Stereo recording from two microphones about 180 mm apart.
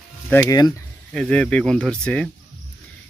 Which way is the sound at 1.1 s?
5° left (ahead or behind).